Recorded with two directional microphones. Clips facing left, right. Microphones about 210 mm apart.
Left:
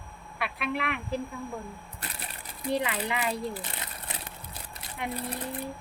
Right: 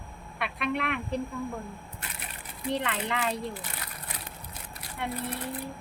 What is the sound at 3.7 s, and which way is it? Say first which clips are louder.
Crumpling: left 1 dB; 25° left (ahead or behind).